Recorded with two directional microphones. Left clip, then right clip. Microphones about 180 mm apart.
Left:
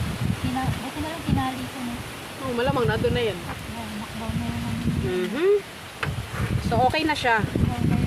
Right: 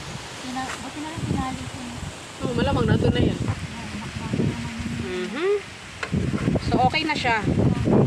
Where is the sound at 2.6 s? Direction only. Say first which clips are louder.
Left 1 dB; 55° right (ahead or behind).